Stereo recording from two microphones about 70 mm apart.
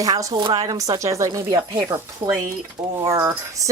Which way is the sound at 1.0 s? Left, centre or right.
Right.